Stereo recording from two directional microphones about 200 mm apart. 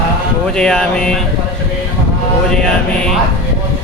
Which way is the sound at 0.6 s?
5° left (ahead or behind).